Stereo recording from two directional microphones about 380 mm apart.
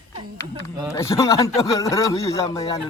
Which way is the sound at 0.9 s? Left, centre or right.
Centre.